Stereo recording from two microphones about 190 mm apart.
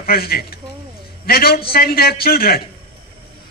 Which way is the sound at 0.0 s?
55° left (ahead or behind).